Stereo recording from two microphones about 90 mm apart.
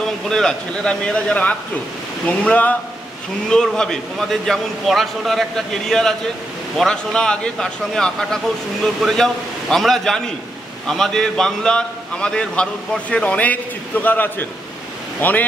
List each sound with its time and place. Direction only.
0.0 s a man's voice: 5° left (ahead or behind)